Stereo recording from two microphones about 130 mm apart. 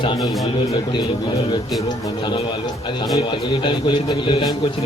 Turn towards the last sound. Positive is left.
turn(degrees=35)  # may be behind; listen again after turning